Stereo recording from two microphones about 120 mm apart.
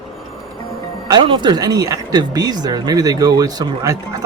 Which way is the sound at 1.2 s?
45° right (ahead or behind).